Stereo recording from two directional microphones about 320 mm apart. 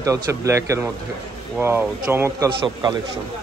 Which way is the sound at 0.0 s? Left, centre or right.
Centre.